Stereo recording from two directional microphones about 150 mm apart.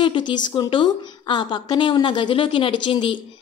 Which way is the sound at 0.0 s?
30° left (ahead or behind).